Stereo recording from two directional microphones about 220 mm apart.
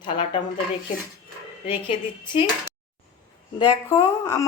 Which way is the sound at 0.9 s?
35° left (ahead or behind).